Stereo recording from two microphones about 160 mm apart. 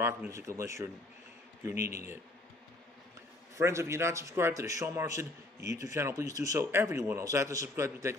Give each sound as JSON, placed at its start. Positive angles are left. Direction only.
{"t": 0.0, "sound": "speech", "side_deg": -15}
{"t": 3.5, "sound": "a man's voice", "side_deg": -15}